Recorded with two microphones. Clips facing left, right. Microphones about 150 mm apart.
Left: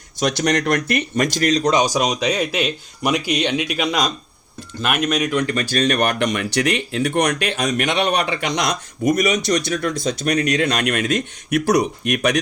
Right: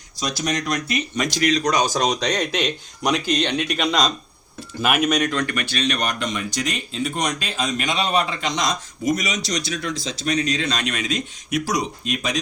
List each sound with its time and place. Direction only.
0.2 s speech: 70° left (ahead or behind); by 1.7 s 40° left (ahead or behind)
1.7 s speech: 15° left (ahead or behind)
5.5 s speech: 35° left (ahead or behind)
5.7 s speech: 50° left (ahead or behind)